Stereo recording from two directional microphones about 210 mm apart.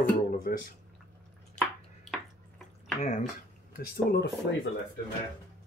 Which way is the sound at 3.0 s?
35° left (ahead or behind).